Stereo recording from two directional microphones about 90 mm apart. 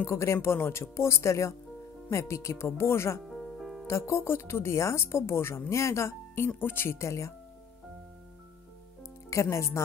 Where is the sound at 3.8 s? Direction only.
30° left (ahead or behind).